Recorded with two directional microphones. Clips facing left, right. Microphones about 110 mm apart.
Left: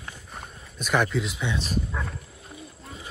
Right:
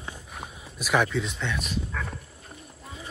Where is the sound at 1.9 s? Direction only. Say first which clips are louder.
Left 1 dB; 20° left (ahead or behind).